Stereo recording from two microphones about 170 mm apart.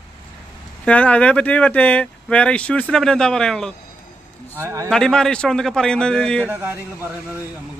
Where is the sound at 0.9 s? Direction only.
10° left (ahead or behind).